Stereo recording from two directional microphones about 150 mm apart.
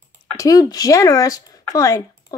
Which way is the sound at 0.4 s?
25° left (ahead or behind).